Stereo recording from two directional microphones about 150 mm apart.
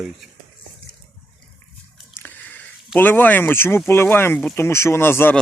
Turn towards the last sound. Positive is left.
turn(degrees=15)  # may be behind; listen again after turning